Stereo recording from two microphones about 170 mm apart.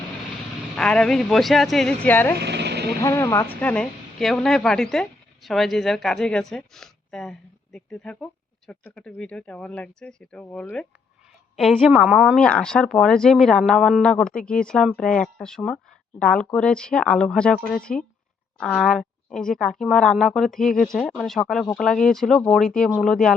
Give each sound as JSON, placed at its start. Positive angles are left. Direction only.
{"t": 0.8, "sound": "speech", "side_deg": 5}
{"t": 2.4, "sound": "vehicle", "side_deg": -80}
{"t": 3.0, "sound": "speech", "side_deg": 20}
{"t": 3.6, "sound": "speech", "side_deg": 5}